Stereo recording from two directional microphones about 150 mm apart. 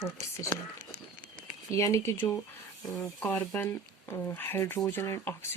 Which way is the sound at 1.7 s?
20° left (ahead or behind).